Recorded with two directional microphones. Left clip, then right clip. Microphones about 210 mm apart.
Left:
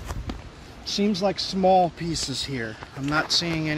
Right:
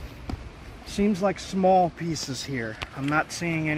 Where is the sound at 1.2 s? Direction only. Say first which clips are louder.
Left 1 dB; 10° left (ahead or behind).